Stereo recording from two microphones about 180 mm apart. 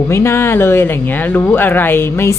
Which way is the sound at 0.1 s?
15° left (ahead or behind).